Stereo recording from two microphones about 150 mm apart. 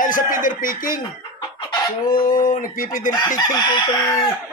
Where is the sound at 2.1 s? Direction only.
65° left (ahead or behind).